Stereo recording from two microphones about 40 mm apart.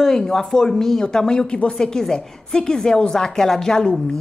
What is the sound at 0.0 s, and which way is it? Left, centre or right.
A woman's voice, centre.